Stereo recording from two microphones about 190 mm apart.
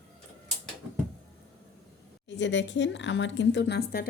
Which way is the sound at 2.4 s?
70° left (ahead or behind).